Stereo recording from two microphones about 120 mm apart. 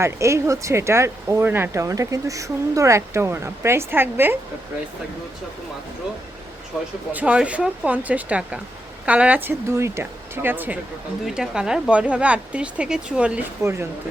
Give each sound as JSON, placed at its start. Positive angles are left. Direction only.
{"t": 0.0, "sound": "speech", "side_deg": -25}
{"t": 6.7, "sound": "speech", "side_deg": 0}
{"t": 7.1, "sound": "speech", "side_deg": -10}
{"t": 13.6, "sound": "speech", "side_deg": -25}